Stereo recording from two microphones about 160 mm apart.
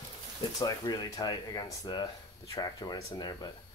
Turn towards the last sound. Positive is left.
turn(degrees=25)  # may be behind; listen again after turning